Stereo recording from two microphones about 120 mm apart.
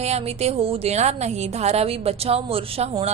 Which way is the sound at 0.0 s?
60° right (ahead or behind).